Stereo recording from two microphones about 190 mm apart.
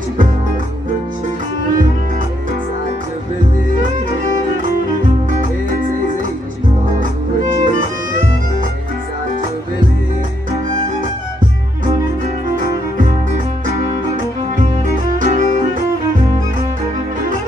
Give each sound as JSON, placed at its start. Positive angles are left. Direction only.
{"t": 7.0, "sound": "music", "side_deg": -45}
{"t": 15.1, "sound": "music", "side_deg": -40}